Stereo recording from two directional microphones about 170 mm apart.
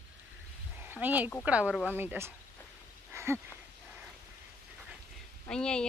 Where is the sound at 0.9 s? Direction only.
10° right (ahead or behind).